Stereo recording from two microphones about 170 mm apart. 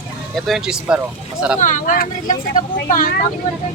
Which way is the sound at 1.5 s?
45° left (ahead or behind).